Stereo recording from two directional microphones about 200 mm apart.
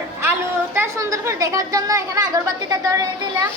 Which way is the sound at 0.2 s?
10° right (ahead or behind).